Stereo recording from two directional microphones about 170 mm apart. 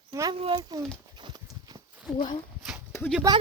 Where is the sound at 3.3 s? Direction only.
20° right (ahead or behind).